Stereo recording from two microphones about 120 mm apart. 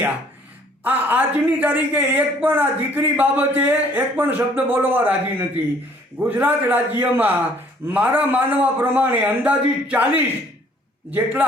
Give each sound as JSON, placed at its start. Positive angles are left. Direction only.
{"t": 0.9, "sound": "a man's voice", "side_deg": -15}